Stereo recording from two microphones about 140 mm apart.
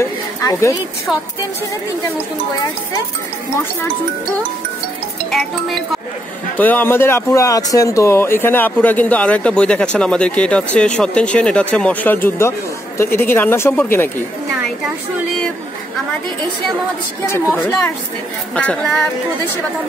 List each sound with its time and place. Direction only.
0.0 s speech: 20° left (ahead or behind)
5.3 s speech: centre (ahead or behind)
6.5 s speech: 15° left (ahead or behind)
17.6 s speech: 15° left (ahead or behind)